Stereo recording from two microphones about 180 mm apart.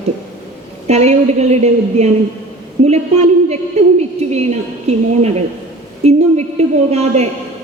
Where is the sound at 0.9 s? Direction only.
40° right (ahead or behind).